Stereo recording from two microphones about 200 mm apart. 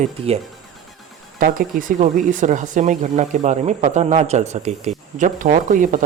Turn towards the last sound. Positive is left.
turn(degrees=-40)  # may be behind; listen again after turning